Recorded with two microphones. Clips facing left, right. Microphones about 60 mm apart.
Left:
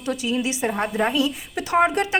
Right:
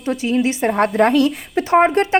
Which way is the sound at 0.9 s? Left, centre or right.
Right.